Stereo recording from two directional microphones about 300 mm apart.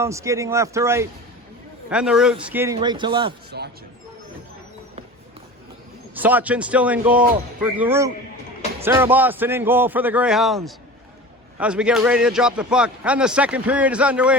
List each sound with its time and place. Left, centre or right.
0.0 s a man's voice: centre
3.5 s speech: right
6.1 s a man's voice: centre